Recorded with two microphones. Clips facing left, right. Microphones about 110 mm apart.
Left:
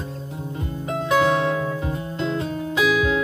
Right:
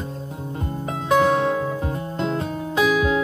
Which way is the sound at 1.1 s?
40° right (ahead or behind).